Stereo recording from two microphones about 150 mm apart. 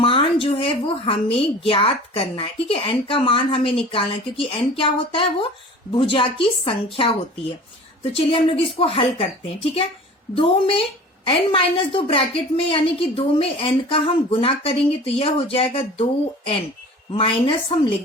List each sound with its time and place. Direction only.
0.0 s a woman's voice: 35° left (ahead or behind)
8.1 s a woman's voice: 40° left (ahead or behind)
10.3 s a woman's voice: 35° left (ahead or behind)
17.1 s a woman's voice: 35° left (ahead or behind)